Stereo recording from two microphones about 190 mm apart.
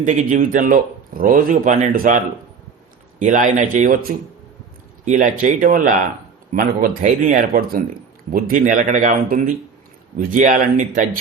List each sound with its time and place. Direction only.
0.0 s speech: 40° right (ahead or behind)
5.0 s speech: 40° right (ahead or behind)